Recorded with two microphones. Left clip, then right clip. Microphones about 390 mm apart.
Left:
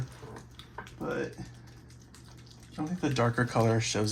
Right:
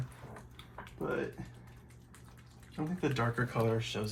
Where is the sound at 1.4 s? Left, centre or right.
Centre.